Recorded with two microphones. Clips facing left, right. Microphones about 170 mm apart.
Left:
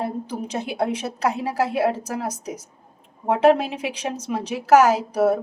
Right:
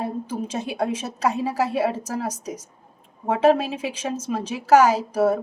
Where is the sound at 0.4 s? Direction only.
10° left (ahead or behind).